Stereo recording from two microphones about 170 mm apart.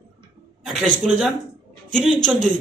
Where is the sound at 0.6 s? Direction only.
Centre (ahead or behind).